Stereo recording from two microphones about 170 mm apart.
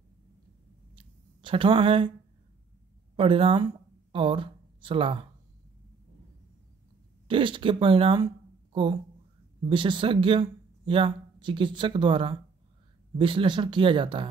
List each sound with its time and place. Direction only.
0.9 s a sound: 30° right (ahead or behind)
3.2 s speech: 30° right (ahead or behind)
7.2 s speech: 30° right (ahead or behind)